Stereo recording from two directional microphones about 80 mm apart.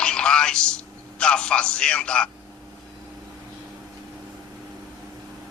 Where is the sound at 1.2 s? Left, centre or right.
Centre.